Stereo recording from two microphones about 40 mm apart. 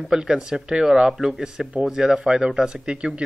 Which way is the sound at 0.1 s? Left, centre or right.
Centre.